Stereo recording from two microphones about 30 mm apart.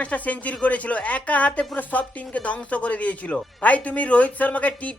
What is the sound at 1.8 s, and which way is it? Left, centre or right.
A woman's voice, left.